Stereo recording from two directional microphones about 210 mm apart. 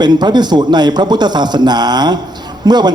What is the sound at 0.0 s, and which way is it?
A man's voice, 20° right (ahead or behind).